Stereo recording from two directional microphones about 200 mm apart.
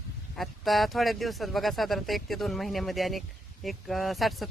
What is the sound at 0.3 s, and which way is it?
A man's voice, centre (ahead or behind).